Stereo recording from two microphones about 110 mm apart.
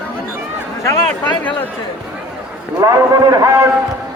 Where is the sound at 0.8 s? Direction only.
30° left (ahead or behind).